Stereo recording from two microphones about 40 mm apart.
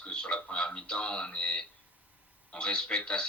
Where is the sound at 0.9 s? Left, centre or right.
Left.